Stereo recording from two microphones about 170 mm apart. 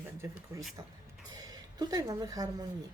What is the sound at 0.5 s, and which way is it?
A woman's voice, 15° right (ahead or behind).